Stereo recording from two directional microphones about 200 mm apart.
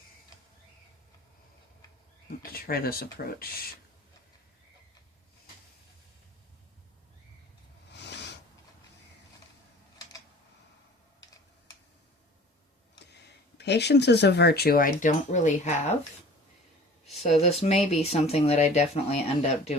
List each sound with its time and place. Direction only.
2.4 s speech: 50° left (ahead or behind)
7.9 s a sound: 60° left (ahead or behind)
13.6 s speech: 60° left (ahead or behind); by 16.0 s 35° left (ahead or behind)
17.1 s speech: 30° left (ahead or behind)